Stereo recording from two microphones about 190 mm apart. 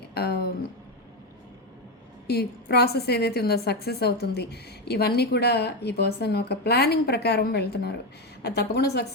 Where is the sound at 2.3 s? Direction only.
60° left (ahead or behind).